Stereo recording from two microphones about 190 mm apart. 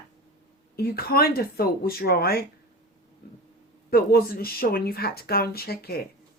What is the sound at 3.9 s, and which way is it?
Speech, 50° left (ahead or behind).